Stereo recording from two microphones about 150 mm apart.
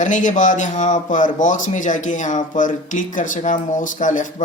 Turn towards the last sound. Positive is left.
turn(degrees=60)  # may be behind; listen again after turning